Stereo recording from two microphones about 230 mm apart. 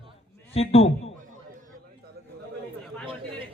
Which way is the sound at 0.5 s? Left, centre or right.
Left.